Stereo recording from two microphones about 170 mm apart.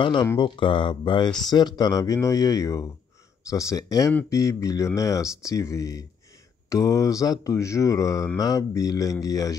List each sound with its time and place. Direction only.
0.0 s mantra: 25° left (ahead or behind)